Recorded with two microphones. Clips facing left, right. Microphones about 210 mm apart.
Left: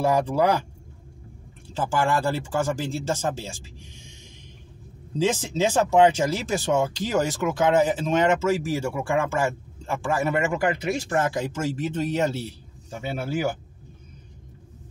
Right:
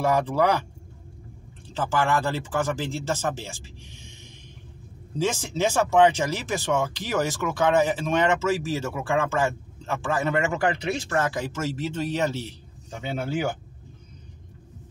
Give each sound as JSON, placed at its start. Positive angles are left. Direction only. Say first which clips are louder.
{"t": 0.0, "sound": "speech", "louder": "left 1 dB", "side_deg": 15}
{"t": 1.7, "sound": "speech", "louder": "left 1 dB", "side_deg": 10}
{"t": 5.2, "sound": "speech", "louder": "left 2 dB", "side_deg": 15}